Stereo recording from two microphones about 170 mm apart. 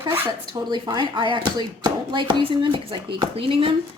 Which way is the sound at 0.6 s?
25° right (ahead or behind).